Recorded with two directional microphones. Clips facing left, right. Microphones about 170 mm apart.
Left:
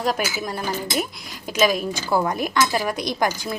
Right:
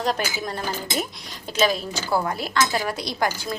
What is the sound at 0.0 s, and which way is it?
A woman's voice, 10° left (ahead or behind).